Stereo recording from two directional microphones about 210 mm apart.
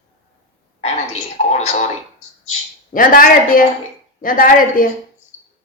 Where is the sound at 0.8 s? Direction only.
30° left (ahead or behind).